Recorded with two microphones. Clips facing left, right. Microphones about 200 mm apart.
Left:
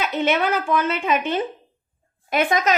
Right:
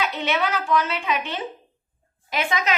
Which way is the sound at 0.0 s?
50° left (ahead or behind).